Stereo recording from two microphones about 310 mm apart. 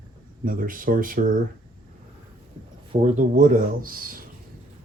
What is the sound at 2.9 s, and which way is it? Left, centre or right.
Speech, right.